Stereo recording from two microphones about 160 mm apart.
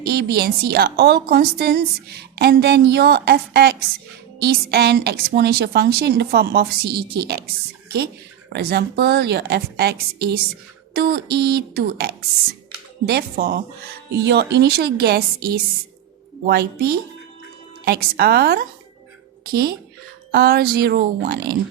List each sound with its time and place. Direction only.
0.0 s a woman's voice: 85° right
8.5 s a woman's voice: 90° right
13.1 s a woman's voice: 75° right (ahead or behind)
14.3 s a woman's voice: 90° right; by 15.6 s 70° right (ahead or behind)
16.5 s a woman's voice: 80° right